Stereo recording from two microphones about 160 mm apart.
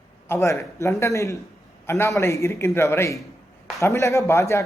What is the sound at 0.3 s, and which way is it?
Speech, 15° left (ahead or behind).